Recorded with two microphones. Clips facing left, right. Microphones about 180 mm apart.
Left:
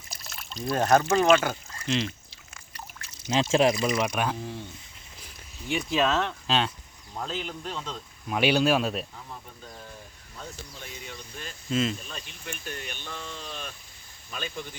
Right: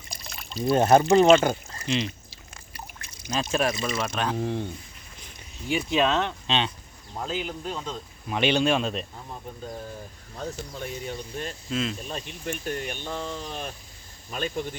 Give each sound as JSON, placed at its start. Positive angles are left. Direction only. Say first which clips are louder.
{"t": 0.1, "sound": "a sound", "louder": "right 3 dB", "side_deg": 0}
{"t": 0.6, "sound": "speech", "louder": "right 4 dB", "side_deg": -25}
{"t": 1.9, "sound": "a sound", "louder": "right 1 dB", "side_deg": 0}
{"t": 3.5, "sound": "speech", "louder": "left 4 dB", "side_deg": 20}
{"t": 4.0, "sound": "speech", "louder": "even", "side_deg": 10}
{"t": 4.4, "sound": "speech", "louder": "right 8 dB", "side_deg": -60}
{"t": 5.2, "sound": "speech", "louder": "right 3 dB", "side_deg": 0}
{"t": 10.3, "sound": "speech", "louder": "right 8 dB", "side_deg": -50}
{"t": 11.7, "sound": "speech", "louder": "left 3 dB", "side_deg": 0}
{"t": 12.0, "sound": "speech", "louder": "right 7 dB", "side_deg": -40}